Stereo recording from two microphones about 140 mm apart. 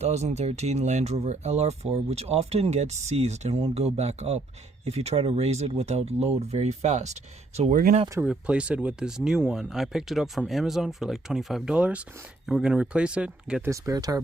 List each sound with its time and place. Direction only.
0.0 s speech: 50° right (ahead or behind)
8.2 s speech: 10° right (ahead or behind)
13.7 s speech: 20° right (ahead or behind)